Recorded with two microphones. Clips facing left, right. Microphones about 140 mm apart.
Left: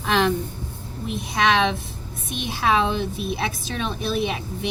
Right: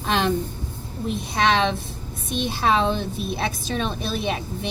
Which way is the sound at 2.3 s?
35° right (ahead or behind).